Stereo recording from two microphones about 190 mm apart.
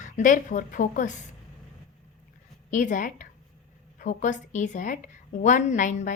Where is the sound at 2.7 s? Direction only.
40° left (ahead or behind).